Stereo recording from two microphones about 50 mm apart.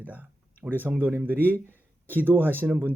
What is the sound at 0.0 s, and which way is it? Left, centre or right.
Speech, right.